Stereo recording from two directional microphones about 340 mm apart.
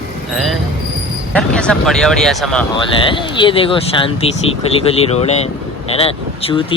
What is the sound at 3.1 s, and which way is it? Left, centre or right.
Speech, centre.